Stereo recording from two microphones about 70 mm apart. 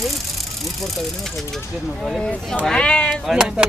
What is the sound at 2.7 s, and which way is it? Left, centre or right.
Speech, centre.